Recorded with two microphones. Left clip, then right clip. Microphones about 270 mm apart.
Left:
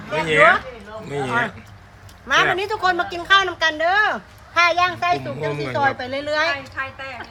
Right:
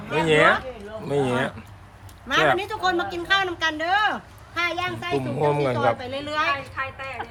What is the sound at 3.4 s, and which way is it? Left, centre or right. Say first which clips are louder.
Speech: left 5 dB; centre.